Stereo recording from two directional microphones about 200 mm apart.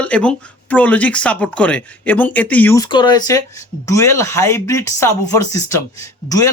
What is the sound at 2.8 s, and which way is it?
Speech, 20° left (ahead or behind).